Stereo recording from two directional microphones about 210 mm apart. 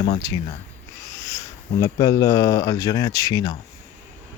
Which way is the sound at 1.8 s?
15° left (ahead or behind).